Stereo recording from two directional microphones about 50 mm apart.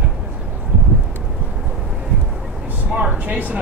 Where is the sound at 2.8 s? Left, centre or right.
Right.